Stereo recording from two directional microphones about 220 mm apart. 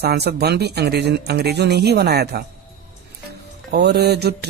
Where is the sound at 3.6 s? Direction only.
50° right (ahead or behind).